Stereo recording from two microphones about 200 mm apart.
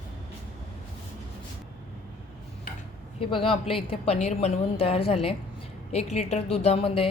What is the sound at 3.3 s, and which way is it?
A woman's voice, 25° left (ahead or behind).